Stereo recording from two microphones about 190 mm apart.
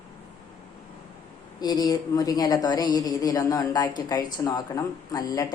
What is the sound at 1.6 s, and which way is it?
A woman's voice, 20° left (ahead or behind).